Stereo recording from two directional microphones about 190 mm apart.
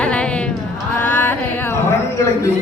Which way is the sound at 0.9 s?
10° left (ahead or behind).